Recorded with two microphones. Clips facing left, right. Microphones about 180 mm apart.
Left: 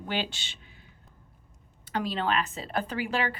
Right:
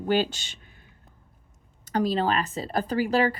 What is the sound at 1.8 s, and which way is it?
Speech, 40° right (ahead or behind).